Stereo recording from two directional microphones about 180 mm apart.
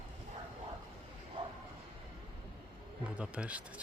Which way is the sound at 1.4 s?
30° right (ahead or behind).